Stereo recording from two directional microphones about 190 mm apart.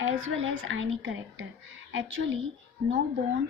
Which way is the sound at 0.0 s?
90° right.